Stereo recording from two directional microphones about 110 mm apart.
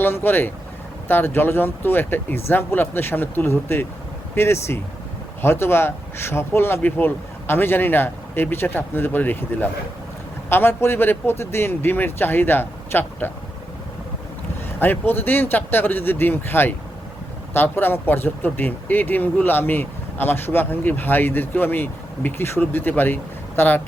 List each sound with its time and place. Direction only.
0.0 s speech: 20° left (ahead or behind)
14.8 s speech: 20° left (ahead or behind)